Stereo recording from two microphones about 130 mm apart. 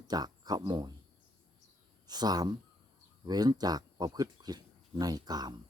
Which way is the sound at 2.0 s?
30° right (ahead or behind).